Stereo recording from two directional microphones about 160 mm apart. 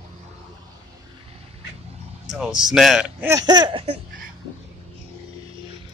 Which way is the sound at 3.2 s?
25° right (ahead or behind).